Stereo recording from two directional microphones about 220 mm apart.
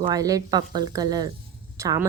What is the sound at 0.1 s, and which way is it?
A woman's voice, 15° right (ahead or behind).